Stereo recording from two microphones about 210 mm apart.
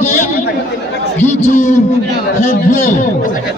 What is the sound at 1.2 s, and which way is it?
Speech, 35° left (ahead or behind).